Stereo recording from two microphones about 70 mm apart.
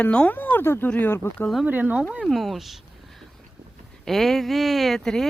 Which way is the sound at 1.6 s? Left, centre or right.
Right.